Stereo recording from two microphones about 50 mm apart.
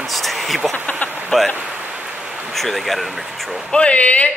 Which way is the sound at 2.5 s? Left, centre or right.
Centre.